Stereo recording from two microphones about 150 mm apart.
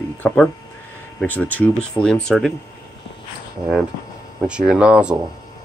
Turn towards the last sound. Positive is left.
turn(degrees=-5)  # may be behind; listen again after turning